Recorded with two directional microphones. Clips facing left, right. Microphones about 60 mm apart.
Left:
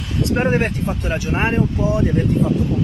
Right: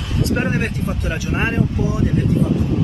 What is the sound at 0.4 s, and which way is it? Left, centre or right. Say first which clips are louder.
Speech: left 3 dB; left.